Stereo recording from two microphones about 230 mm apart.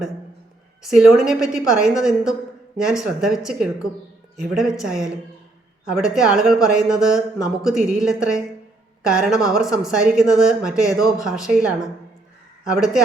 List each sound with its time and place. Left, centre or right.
0.8 s a woman's voice: centre